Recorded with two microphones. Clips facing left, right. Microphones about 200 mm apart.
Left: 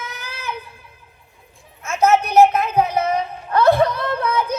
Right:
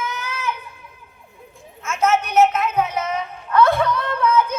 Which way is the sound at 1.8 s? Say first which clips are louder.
Left 3 dB; 35° left (ahead or behind).